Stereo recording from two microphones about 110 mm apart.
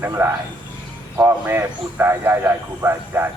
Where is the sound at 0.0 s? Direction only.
20° right (ahead or behind).